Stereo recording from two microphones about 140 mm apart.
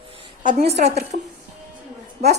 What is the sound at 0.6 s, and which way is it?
Speech, 50° right (ahead or behind).